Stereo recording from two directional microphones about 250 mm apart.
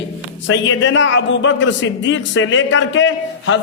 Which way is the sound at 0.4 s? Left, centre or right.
Left.